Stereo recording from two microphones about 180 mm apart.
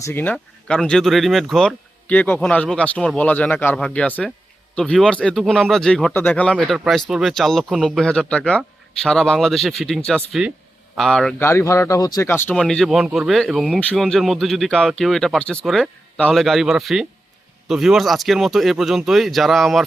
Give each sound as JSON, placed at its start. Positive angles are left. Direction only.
{"t": 0.0, "sound": "speech", "side_deg": 10}
{"t": 11.4, "sound": "speech", "side_deg": 15}